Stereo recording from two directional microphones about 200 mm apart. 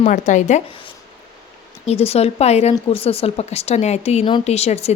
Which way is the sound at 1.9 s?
30° left (ahead or behind).